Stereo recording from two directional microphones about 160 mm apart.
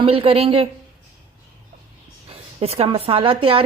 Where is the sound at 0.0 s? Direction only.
35° right (ahead or behind).